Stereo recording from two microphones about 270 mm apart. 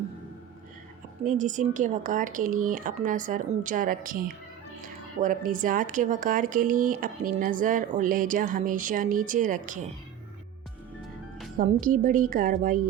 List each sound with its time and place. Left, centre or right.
1.2 s speech: right
11.5 s speech: right